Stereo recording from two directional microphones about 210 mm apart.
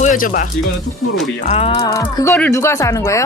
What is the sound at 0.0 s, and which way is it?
Speech, 40° left (ahead or behind).